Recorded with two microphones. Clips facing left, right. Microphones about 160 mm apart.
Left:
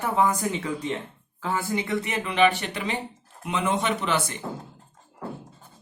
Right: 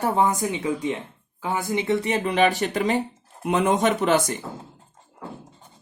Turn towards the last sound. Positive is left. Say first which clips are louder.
# right 6 dB
turn(degrees=-45)  # may be behind; listen again after turning